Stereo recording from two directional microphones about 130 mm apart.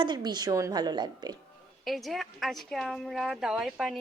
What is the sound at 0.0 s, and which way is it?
A woman's voice, 35° right (ahead or behind).